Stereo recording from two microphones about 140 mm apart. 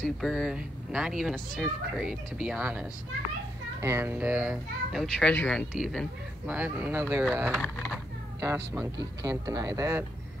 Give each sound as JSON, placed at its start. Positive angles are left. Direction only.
{"t": 0.0, "sound": "a child's voice", "side_deg": 0}
{"t": 5.0, "sound": "speech", "side_deg": 10}
{"t": 8.4, "sound": "speech", "side_deg": -20}